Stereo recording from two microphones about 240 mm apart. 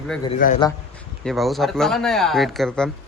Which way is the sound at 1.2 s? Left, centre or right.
Centre.